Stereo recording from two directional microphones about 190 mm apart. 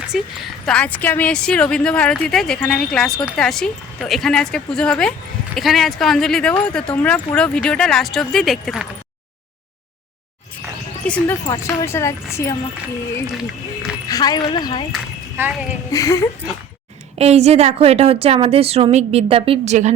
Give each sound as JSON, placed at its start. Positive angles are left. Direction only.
{"t": 0.1, "sound": "a woman's voice", "side_deg": 0}
{"t": 11.0, "sound": "speech", "side_deg": 5}
{"t": 11.4, "sound": "speech", "side_deg": 15}
{"t": 14.1, "sound": "speech", "side_deg": 20}
{"t": 15.4, "sound": "speech", "side_deg": -10}
{"t": 15.9, "sound": "speech", "side_deg": 15}
{"t": 17.2, "sound": "a woman's voice", "side_deg": -35}